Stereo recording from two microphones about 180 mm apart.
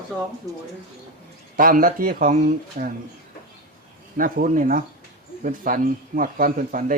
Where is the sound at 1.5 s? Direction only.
50° right (ahead or behind).